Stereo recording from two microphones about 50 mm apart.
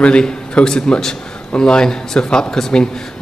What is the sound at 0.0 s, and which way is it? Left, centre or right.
A man's voice, left.